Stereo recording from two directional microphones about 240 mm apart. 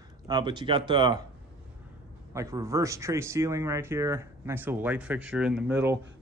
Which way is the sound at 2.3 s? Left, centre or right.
Centre.